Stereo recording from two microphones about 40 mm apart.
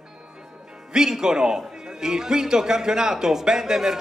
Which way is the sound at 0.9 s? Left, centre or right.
Centre.